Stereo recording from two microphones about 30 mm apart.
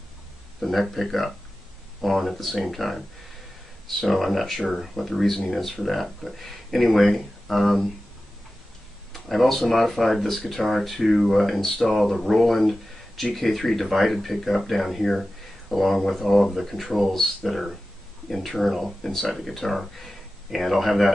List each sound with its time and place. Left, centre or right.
0.6 s speech: centre
9.1 s speech: centre